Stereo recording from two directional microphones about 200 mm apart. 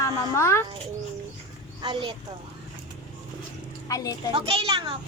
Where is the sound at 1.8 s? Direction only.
25° right (ahead or behind).